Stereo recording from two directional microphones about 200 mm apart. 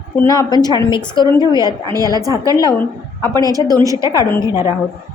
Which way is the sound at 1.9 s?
20° right (ahead or behind).